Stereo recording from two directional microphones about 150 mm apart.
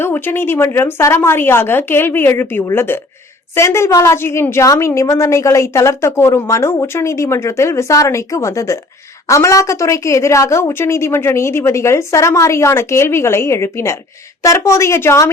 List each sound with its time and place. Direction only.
0.0 s a woman's voice: 15° left (ahead or behind)